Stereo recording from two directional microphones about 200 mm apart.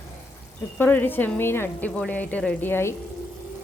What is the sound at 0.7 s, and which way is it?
Speech, 10° left (ahead or behind).